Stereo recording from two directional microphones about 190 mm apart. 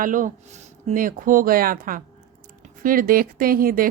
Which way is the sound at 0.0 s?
45° right (ahead or behind).